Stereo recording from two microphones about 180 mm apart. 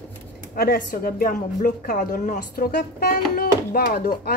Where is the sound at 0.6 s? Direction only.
55° left (ahead or behind).